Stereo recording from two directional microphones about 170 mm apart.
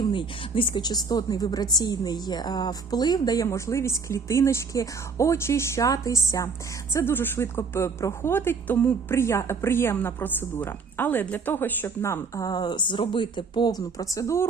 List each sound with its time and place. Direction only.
0.0 s a woman's voice: 30° left (ahead or behind)